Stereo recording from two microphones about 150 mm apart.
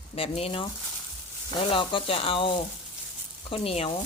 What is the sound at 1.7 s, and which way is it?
A woman's voice, 35° left (ahead or behind).